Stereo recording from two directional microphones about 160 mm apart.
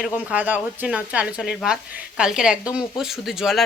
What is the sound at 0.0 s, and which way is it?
Speech, 10° right (ahead or behind).